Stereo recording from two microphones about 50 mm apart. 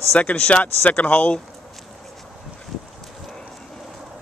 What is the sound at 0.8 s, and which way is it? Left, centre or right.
Speech, left.